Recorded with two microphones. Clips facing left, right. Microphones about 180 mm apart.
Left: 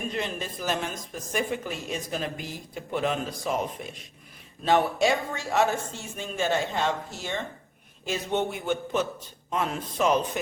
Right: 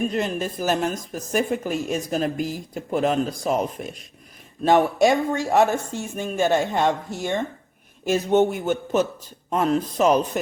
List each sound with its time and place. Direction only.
0.1 s a woman's voice: 45° right (ahead or behind)